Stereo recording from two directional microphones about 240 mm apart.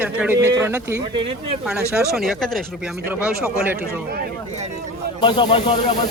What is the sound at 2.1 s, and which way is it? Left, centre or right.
Speech, centre.